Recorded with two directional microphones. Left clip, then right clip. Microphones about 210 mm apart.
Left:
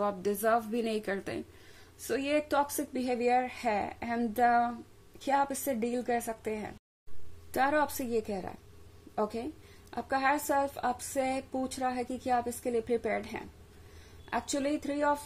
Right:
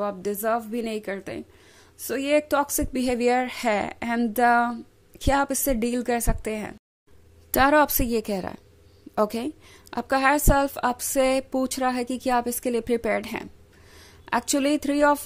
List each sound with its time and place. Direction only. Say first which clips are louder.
0.0 s a woman's voice: right 3 dB; 20° right (ahead or behind)
2.0 s a woman's voice: right 8 dB; 25° right (ahead or behind); by 15.1 s 40° right (ahead or behind)